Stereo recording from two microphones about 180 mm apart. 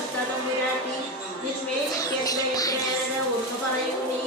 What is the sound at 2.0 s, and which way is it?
Music, 20° left (ahead or behind).